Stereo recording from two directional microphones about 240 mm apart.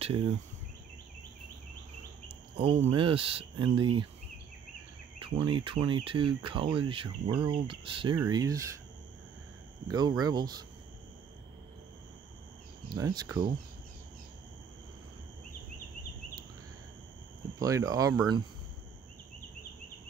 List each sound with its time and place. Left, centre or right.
0.0 s cricket: right
2.5 s speech: right
5.2 s speech: centre
9.8 s speech: centre
12.9 s speech: centre
17.6 s speech: centre